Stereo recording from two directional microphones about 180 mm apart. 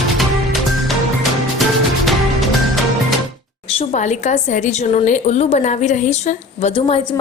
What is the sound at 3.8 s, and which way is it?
A woman's voice, 40° left (ahead or behind).